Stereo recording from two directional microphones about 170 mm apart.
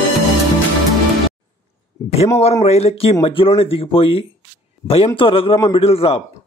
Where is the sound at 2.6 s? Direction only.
35° left (ahead or behind).